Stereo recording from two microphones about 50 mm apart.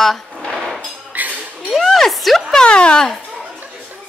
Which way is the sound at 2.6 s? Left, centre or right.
Left.